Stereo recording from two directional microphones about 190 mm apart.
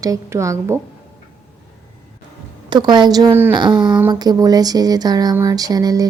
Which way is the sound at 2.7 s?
25° right (ahead or behind).